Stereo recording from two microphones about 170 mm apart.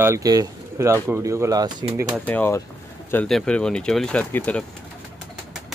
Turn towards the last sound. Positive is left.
turn(degrees=10)  # may be behind; listen again after turning